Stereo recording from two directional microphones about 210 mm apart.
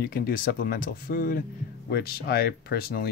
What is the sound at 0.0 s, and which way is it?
Speech, 45° left (ahead or behind).